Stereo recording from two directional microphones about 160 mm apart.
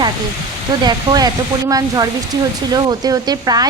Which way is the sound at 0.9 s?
25° right (ahead or behind).